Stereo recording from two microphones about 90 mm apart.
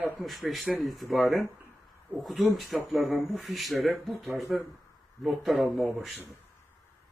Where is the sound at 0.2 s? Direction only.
Centre (ahead or behind).